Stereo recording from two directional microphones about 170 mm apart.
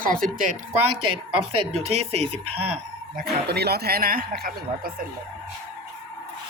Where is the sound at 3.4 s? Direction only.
75° right (ahead or behind).